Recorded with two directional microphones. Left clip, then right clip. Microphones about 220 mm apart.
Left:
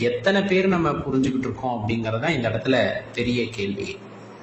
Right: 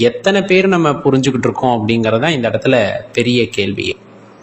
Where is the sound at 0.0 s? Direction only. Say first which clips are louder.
Right 8 dB; 35° right (ahead or behind).